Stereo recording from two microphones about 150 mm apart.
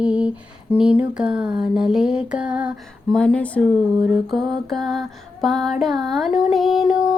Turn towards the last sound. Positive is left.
turn(degrees=0)  # may be behind; listen again after turning